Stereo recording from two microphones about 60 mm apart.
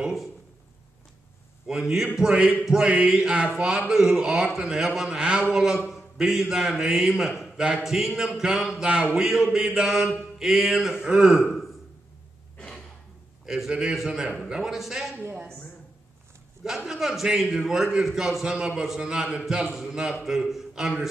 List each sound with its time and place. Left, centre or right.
0.0 s a sound: centre
1.7 s a man's voice: centre
2.9 s a man's voice: centre
4.2 s a man's voice: centre
7.8 s a man's voice: centre
13.5 s a man's voice: centre
16.6 s a man's voice: centre